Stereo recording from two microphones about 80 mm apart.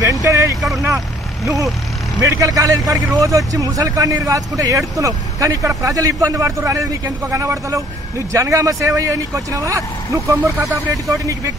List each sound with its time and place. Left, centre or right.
0.0 s vehicle: right
0.6 s speech: centre
1.4 s speech: right